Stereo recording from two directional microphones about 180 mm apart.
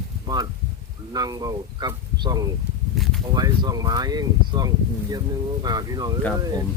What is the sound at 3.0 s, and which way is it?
Speech, centre (ahead or behind).